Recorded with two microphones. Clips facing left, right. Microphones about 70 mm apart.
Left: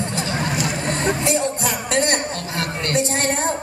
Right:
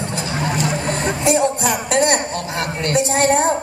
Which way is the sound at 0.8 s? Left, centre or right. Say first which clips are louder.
Right 1 dB; centre.